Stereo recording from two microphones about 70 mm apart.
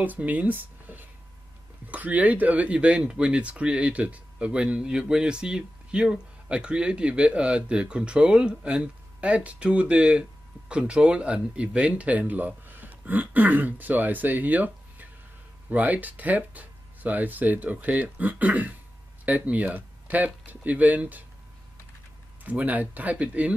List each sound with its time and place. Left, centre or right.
0.0 s speech: right
22.4 s speech: right